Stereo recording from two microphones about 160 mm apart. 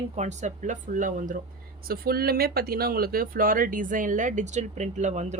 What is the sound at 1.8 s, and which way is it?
Speech, 70° right (ahead or behind).